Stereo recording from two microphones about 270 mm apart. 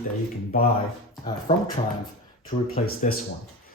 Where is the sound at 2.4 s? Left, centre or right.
Left.